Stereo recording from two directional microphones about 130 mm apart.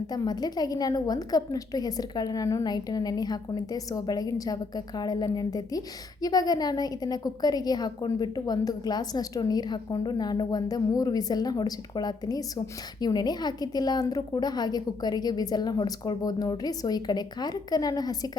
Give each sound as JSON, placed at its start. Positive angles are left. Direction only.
{"t": 0.1, "sound": "a woman's voice", "side_deg": 30}